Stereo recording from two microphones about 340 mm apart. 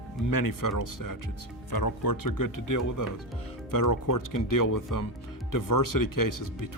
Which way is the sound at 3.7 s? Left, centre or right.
Left.